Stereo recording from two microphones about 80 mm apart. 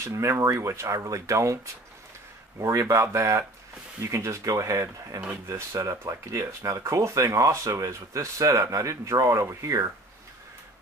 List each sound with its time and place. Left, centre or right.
0.0 s speech: right
2.6 s speech: right